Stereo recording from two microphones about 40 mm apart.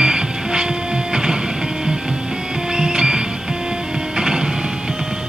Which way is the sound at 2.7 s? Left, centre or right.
Centre.